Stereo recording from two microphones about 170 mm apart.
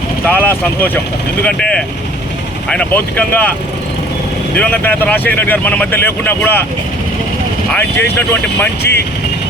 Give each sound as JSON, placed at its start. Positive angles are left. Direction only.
{"t": 0.3, "sound": "speech", "side_deg": 10}
{"t": 4.5, "sound": "speech", "side_deg": 10}
{"t": 7.7, "sound": "speech", "side_deg": 10}
{"t": 8.8, "sound": "speech", "side_deg": 75}